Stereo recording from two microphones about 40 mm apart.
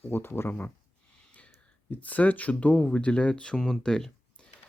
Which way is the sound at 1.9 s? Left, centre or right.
Left.